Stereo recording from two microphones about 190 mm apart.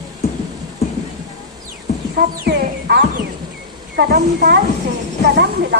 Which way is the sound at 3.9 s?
55° right (ahead or behind).